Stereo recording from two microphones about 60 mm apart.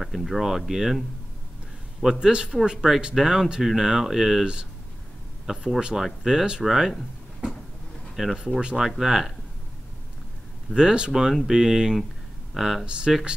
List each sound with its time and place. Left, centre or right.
0.0 s speech: centre
2.1 s speech: centre
8.2 s speech: centre
10.7 s speech: centre
12.8 s speech: centre